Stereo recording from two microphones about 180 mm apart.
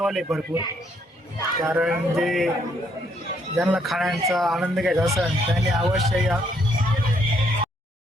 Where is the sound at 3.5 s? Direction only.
5° right (ahead or behind).